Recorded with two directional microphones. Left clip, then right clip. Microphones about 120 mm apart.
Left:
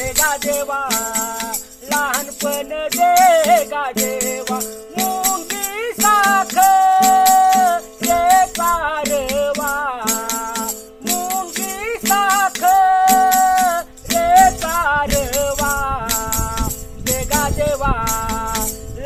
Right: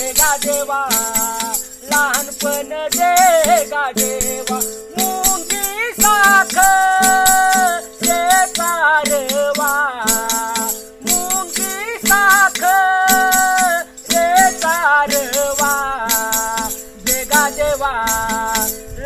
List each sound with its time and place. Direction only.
0.2 s music: 30° left (ahead or behind); by 9.0 s 50° left (ahead or behind)
9.0 s music: 35° left (ahead or behind)
13.7 s music: 45° left (ahead or behind)